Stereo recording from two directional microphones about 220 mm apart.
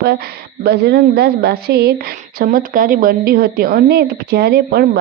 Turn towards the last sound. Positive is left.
turn(degrees=-45)  # may be behind; listen again after turning